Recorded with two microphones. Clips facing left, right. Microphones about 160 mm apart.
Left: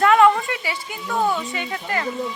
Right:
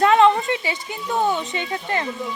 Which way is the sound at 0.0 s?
25° right (ahead or behind).